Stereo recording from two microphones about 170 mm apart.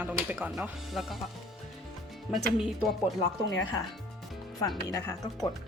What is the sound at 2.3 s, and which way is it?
Speech, 5° right (ahead or behind).